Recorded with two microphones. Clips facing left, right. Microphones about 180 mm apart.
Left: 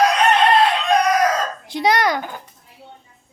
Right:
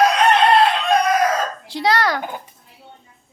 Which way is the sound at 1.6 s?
15° left (ahead or behind).